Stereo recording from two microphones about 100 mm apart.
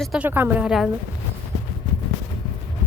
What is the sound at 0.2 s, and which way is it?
Speech, 20° right (ahead or behind).